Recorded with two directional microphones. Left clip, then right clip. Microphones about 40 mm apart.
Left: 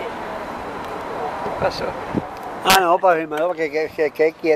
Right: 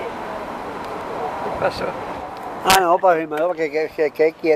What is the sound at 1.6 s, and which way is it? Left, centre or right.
Speech, centre.